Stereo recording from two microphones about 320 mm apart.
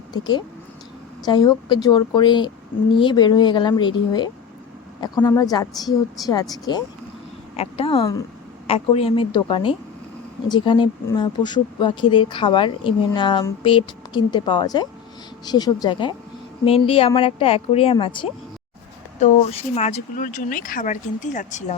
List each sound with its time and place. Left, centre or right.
0.1 s speech: centre